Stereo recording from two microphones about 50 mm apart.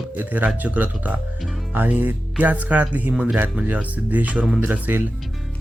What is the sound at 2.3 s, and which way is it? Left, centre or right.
Speech, right.